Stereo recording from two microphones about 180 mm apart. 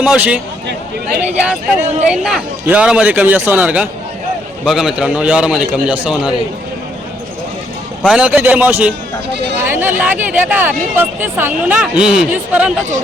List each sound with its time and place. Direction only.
0.0 s a man's voice: 5° right (ahead or behind)
8.0 s speech: 5° right (ahead or behind)